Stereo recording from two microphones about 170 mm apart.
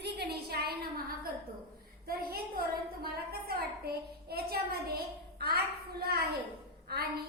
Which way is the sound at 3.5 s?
65° right (ahead or behind).